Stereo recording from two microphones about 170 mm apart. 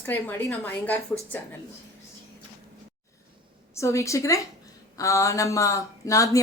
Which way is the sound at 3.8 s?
15° left (ahead or behind).